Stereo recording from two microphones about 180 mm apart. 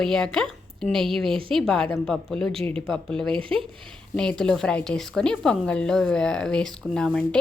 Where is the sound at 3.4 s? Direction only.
30° right (ahead or behind).